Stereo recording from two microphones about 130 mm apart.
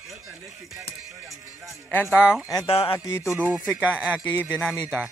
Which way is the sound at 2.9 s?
20° left (ahead or behind).